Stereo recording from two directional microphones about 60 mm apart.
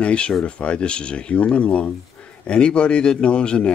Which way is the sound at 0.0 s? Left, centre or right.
Centre.